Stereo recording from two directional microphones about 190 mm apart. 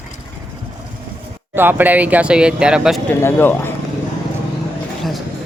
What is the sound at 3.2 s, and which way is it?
Speech, 10° left (ahead or behind).